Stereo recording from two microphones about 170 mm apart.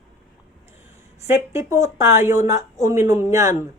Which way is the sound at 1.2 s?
15° right (ahead or behind).